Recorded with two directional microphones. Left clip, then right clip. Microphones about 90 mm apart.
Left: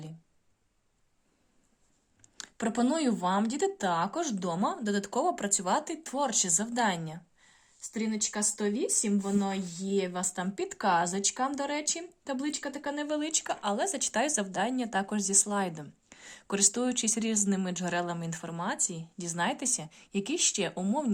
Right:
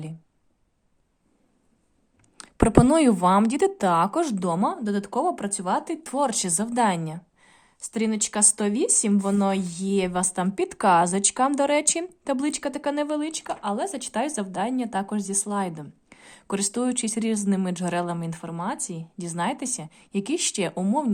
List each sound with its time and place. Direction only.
2.6 s speech: 55° right (ahead or behind); by 4.6 s 40° right (ahead or behind)
4.6 s speech: 15° right (ahead or behind)
6.0 s a woman's voice: 40° right (ahead or behind)
7.8 s speech: 65° right (ahead or behind); by 10.4 s 50° right (ahead or behind)
10.5 s a woman's voice: 40° right (ahead or behind)
11.0 s speech: 45° right (ahead or behind)
13.1 s speech: centre (ahead or behind)
18.8 s speech: 15° right (ahead or behind)
19.4 s speech: centre (ahead or behind)
20.2 s speech: 20° right (ahead or behind)